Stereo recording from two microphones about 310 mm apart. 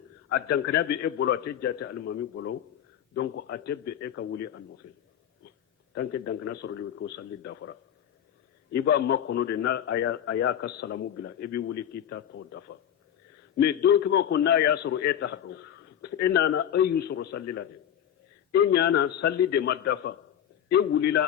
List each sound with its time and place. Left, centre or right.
0.3 s a man's voice: left
5.9 s a man's voice: left